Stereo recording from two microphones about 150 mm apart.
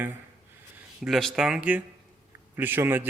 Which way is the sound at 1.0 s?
Centre (ahead or behind).